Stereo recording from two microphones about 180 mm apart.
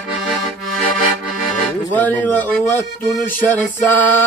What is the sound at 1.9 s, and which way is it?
Music, 10° left (ahead or behind).